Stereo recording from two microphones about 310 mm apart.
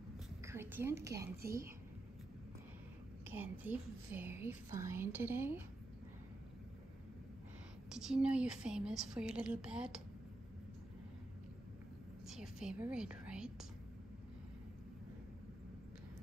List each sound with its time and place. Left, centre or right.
0.4 s a sound: centre
3.3 s a woman's voice: centre
7.9 s speech: centre
12.3 s a woman's voice: centre